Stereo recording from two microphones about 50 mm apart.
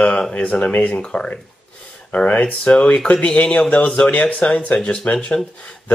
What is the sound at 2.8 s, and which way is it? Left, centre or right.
A man's voice, centre.